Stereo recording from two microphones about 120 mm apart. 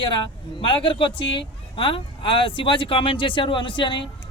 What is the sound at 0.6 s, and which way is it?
Speech, 45° left (ahead or behind).